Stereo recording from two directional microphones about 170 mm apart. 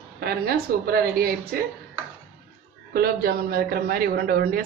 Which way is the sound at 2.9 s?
65° right (ahead or behind).